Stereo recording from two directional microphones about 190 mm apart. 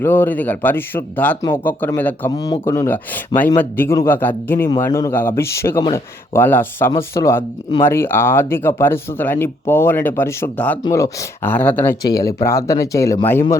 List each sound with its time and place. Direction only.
0.0 s speech: 10° left (ahead or behind)
2.3 s speech: 20° left (ahead or behind)